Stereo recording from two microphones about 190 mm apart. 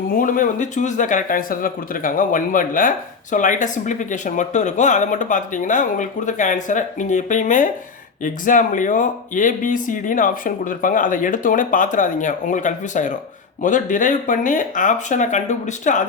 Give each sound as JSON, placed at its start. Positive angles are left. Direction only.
{"t": 0.1, "sound": "a man's voice", "side_deg": 45}